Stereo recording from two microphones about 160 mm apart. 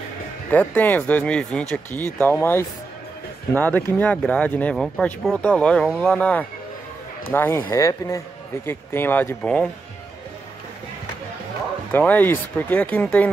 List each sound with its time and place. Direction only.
0.5 s speech: 10° left (ahead or behind)
11.9 s speech: 10° left (ahead or behind)